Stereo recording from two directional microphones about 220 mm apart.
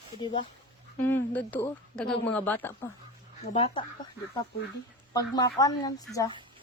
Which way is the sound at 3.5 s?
25° left (ahead or behind).